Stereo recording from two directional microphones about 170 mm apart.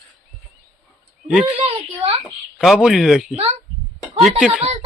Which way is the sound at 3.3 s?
40° right (ahead or behind).